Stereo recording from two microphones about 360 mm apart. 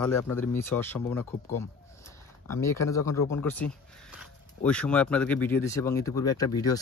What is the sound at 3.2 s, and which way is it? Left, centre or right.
Speech, left.